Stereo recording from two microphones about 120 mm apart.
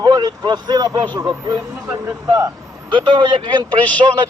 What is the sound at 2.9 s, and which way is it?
Speech, 40° right (ahead or behind).